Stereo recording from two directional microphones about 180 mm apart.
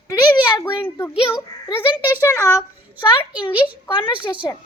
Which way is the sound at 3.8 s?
25° left (ahead or behind).